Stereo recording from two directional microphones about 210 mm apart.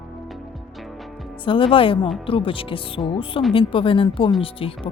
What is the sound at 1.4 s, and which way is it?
Speech, 25° left (ahead or behind).